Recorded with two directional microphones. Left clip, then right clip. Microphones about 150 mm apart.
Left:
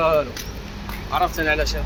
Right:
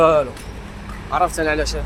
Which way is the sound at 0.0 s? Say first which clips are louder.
Right 4 dB; 90° right.